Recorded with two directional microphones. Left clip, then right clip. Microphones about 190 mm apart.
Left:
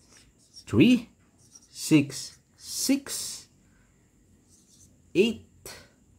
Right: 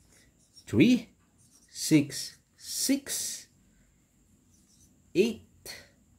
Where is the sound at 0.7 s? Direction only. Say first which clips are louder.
Left 2 dB; 5° left (ahead or behind).